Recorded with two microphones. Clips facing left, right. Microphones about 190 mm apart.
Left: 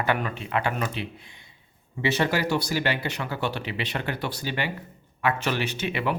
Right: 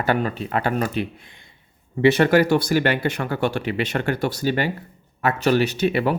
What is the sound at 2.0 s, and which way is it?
Speech, 55° right (ahead or behind).